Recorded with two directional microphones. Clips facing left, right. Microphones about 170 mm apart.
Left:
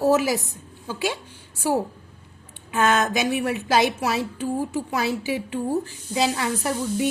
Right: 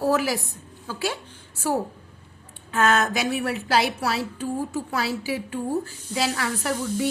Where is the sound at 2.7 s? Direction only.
20° left (ahead or behind).